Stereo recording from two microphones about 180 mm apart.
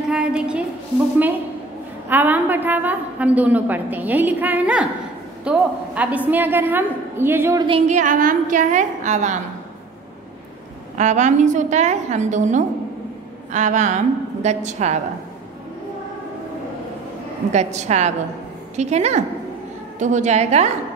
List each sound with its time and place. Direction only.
0.1 s a woman's voice: 5° right (ahead or behind)
2.0 s a woman's voice: 10° right (ahead or behind)
7.6 s a woman's voice: 35° right (ahead or behind)
11.0 s a woman's voice: 40° right (ahead or behind)
17.5 s a woman's voice: 40° right (ahead or behind)